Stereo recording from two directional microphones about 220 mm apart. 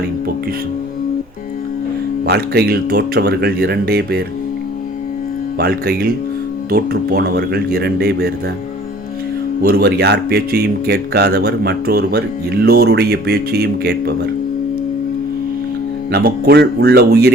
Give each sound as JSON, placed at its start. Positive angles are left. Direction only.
{"t": 2.2, "sound": "speech", "side_deg": -45}
{"t": 5.5, "sound": "speech", "side_deg": -45}
{"t": 9.6, "sound": "speech", "side_deg": -45}
{"t": 16.1, "sound": "speech", "side_deg": -45}